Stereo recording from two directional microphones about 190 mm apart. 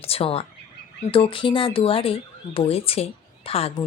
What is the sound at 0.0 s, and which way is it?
A woman's voice, 30° left (ahead or behind).